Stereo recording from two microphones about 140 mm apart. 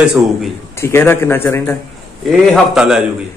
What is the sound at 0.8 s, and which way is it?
Speech, 15° left (ahead or behind).